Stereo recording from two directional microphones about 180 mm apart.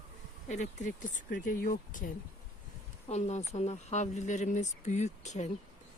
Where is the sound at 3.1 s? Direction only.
40° left (ahead or behind).